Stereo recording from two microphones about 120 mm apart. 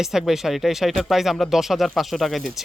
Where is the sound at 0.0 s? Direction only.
5° right (ahead or behind).